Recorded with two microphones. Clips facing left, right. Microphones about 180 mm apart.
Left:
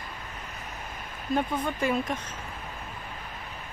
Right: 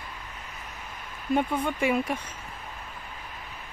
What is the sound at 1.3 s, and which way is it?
Speech, 10° right (ahead or behind).